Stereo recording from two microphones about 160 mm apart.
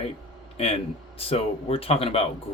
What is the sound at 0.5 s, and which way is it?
A man's voice, 40° left (ahead or behind).